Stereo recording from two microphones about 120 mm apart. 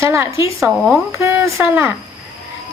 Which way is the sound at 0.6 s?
Centre (ahead or behind).